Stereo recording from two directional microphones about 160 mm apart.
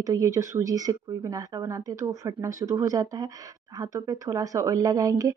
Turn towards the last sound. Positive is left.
turn(degrees=-20)  # may be behind; listen again after turning